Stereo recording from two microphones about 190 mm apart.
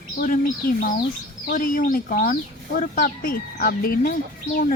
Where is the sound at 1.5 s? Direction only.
45° left (ahead or behind).